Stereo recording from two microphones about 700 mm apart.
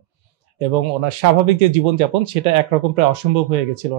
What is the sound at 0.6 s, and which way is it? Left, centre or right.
Speech, right.